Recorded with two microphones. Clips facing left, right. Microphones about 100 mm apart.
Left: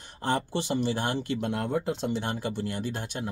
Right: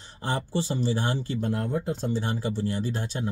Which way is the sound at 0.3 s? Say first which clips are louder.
Left 1 dB; 60° left (ahead or behind).